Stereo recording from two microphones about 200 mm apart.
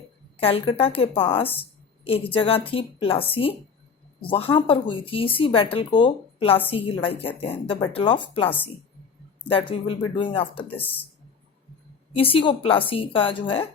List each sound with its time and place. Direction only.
0.3 s speech: 30° left (ahead or behind)
12.1 s speech: 25° left (ahead or behind)